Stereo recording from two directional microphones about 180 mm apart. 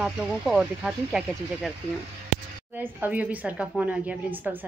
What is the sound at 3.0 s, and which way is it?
A woman's voice, 10° right (ahead or behind).